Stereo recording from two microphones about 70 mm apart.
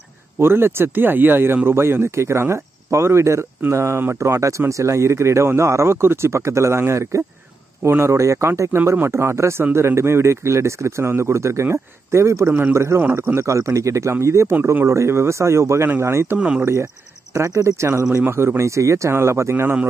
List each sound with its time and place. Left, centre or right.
0.4 s speech: right
12.4 s a man's voice: right
12.7 s speech: right
14.5 s speech: right
16.3 s speech: centre
17.3 s speech: right